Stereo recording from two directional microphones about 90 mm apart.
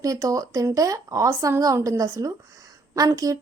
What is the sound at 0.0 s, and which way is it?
A woman's voice, 40° right (ahead or behind).